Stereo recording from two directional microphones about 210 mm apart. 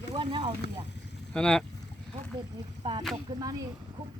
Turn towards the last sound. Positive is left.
turn(degrees=-20)  # may be behind; listen again after turning